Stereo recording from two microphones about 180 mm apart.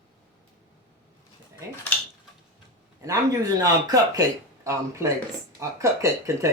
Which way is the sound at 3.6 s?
20° right (ahead or behind).